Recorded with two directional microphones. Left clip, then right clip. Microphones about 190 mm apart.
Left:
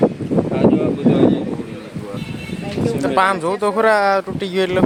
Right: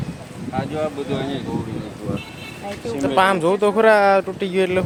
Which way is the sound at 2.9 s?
5° right (ahead or behind).